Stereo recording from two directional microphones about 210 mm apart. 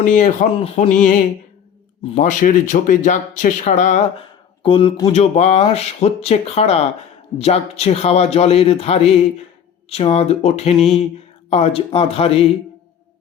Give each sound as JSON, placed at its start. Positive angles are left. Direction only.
{"t": 0.0, "sound": "speech", "side_deg": 40}
{"t": 2.1, "sound": "a man's voice", "side_deg": 40}
{"t": 10.8, "sound": "speech", "side_deg": 0}
{"t": 11.4, "sound": "a man's voice", "side_deg": 30}